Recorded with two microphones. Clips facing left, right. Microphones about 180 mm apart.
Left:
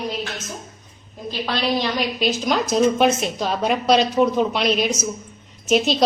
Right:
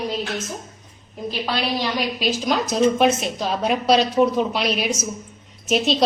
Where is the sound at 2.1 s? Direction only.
Centre (ahead or behind).